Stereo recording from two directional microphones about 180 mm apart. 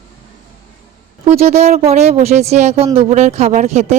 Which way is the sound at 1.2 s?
35° right (ahead or behind).